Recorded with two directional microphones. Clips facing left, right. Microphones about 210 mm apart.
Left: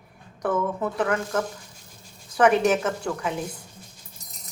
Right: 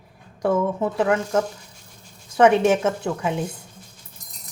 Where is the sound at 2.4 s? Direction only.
25° right (ahead or behind).